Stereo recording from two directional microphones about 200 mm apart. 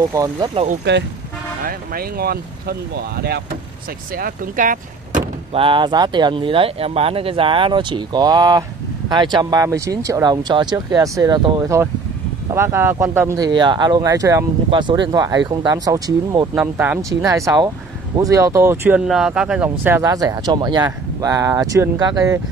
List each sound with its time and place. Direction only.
0.1 s speech: 15° right (ahead or behind)
0.9 s speech: 55° right (ahead or behind)
4.2 s vehicle: 40° right (ahead or behind)
5.6 s speech: 25° right (ahead or behind)